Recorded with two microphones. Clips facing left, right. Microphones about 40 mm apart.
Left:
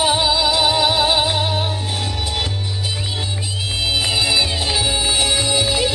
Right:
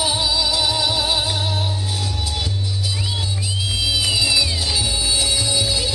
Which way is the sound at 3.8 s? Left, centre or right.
Left.